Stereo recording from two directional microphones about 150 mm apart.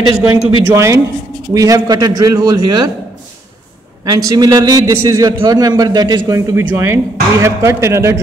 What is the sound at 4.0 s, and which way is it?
Speech, 25° right (ahead or behind).